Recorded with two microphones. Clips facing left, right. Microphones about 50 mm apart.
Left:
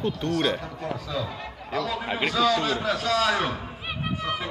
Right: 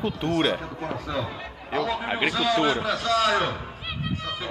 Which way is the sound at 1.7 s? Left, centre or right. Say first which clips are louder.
Right 2 dB; centre.